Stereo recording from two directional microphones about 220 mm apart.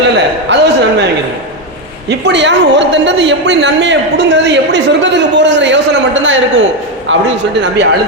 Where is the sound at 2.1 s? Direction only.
50° right (ahead or behind).